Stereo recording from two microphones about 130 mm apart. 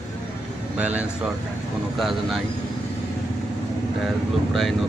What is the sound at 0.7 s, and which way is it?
Speech, 10° right (ahead or behind).